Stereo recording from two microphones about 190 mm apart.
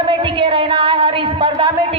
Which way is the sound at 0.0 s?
25° right (ahead or behind).